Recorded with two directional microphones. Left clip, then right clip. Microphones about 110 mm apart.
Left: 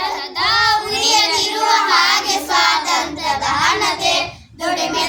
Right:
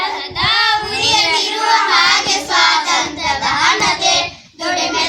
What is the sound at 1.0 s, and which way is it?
Child singing, 35° left (ahead or behind).